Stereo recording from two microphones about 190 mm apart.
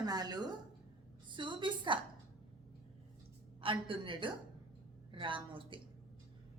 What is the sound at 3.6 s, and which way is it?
A woman's voice, 25° right (ahead or behind).